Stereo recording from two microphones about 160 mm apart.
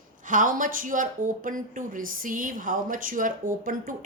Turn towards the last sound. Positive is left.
turn(degrees=-60)  # may be behind; listen again after turning